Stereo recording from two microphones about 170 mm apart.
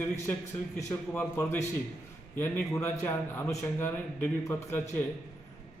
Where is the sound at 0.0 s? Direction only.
10° left (ahead or behind).